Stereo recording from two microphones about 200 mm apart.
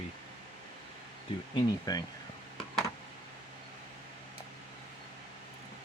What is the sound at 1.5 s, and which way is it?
Speech, 20° left (ahead or behind).